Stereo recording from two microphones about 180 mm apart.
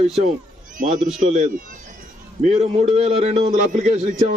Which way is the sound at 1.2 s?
45° right (ahead or behind).